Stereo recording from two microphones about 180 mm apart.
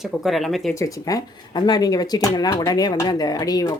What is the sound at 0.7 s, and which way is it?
Speech, 20° left (ahead or behind).